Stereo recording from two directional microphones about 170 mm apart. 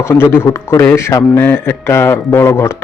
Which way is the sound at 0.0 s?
10° left (ahead or behind).